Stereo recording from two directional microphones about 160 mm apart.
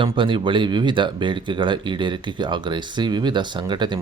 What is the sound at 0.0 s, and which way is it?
Speech, 30° right (ahead or behind).